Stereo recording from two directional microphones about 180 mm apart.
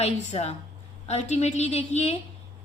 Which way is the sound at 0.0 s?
35° left (ahead or behind).